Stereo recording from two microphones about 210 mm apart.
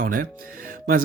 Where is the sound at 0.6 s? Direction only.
40° right (ahead or behind).